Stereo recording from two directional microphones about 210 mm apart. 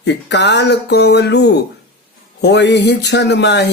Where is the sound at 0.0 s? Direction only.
55° left (ahead or behind).